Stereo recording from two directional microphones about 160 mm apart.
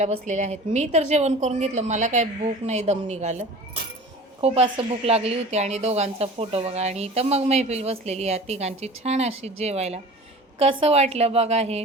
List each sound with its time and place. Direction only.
0.0 s a woman's voice: 50° right (ahead or behind)